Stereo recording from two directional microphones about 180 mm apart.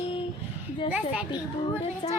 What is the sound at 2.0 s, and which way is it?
Speech, 30° left (ahead or behind).